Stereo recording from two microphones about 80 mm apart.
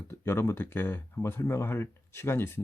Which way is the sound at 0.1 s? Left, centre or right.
Left.